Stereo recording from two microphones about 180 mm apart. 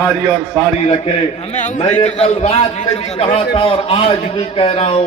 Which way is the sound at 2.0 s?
35° left (ahead or behind).